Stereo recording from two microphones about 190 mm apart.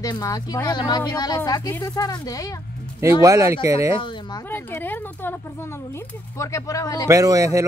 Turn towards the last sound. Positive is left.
turn(degrees=-15)  # may be behind; listen again after turning